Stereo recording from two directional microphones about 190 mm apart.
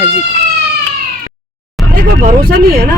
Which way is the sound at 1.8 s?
Centre (ahead or behind).